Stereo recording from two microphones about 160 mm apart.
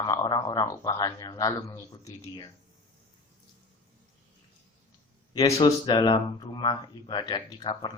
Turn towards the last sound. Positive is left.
turn(degrees=25)  # may be behind; listen again after turning